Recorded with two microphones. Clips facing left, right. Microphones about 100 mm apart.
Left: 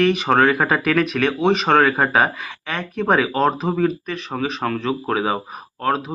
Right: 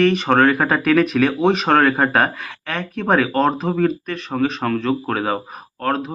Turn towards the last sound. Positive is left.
turn(degrees=5)  # may be behind; listen again after turning